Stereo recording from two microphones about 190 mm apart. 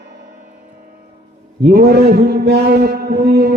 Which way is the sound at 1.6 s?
60° right (ahead or behind).